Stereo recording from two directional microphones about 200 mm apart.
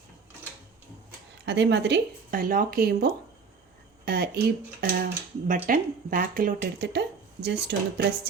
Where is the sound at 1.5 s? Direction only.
60° right (ahead or behind).